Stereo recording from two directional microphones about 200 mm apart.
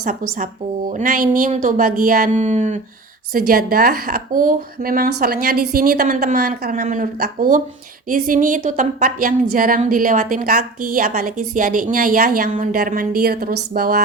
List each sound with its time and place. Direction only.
0.9 s speech: 40° right (ahead or behind)
3.3 s a woman's voice: 45° right (ahead or behind)